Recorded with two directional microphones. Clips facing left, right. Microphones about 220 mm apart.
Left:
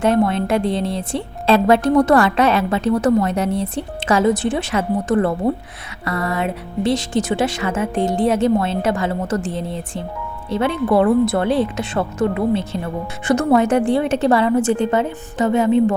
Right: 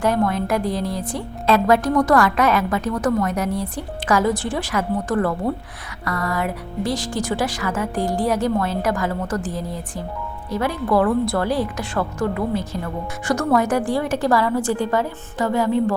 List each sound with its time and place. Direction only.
0.0 s a woman's voice: 25° left (ahead or behind)